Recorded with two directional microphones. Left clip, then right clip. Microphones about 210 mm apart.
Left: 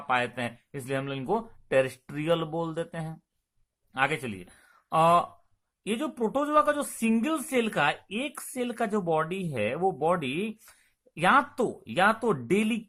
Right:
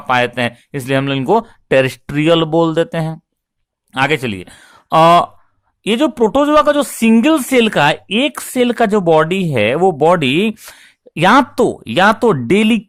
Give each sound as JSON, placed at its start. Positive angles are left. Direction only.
{"t": 0.1, "sound": "speech", "side_deg": -45}